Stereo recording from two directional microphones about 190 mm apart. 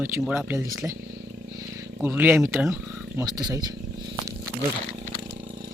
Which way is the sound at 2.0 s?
10° right (ahead or behind).